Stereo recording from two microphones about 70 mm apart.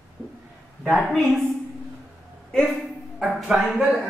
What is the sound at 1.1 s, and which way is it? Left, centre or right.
Speech, centre.